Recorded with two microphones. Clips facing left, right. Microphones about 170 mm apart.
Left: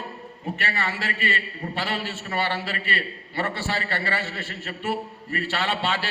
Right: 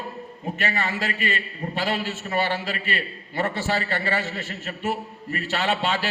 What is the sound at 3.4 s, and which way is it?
Speech, 45° right (ahead or behind).